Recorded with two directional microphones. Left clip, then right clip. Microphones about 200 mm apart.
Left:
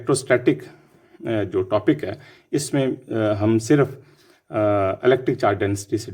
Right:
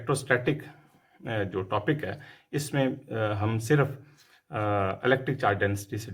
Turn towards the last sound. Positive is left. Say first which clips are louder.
# left 6 dB
turn(degrees=45)  # may be behind; listen again after turning